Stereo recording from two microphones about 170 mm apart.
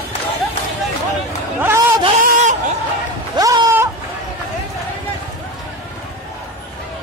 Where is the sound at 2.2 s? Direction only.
50° right (ahead or behind).